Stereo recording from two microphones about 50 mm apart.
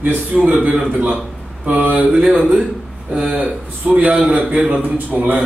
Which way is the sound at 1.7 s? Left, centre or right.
Right.